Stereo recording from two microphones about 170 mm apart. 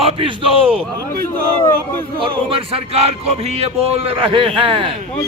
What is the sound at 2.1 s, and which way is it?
Speech, 30° right (ahead or behind).